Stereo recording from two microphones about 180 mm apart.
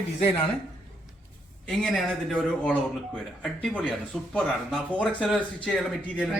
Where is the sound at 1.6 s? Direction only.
5° left (ahead or behind).